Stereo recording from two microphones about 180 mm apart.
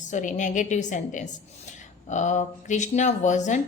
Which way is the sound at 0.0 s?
45° left (ahead or behind).